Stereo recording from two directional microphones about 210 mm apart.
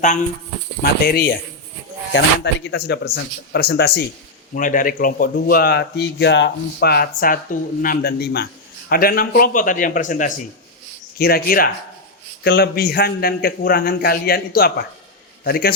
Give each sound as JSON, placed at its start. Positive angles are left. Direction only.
{"t": 0.0, "sound": "speech", "side_deg": 35}
{"t": 0.8, "sound": "speech", "side_deg": 45}
{"t": 4.5, "sound": "speech", "side_deg": 40}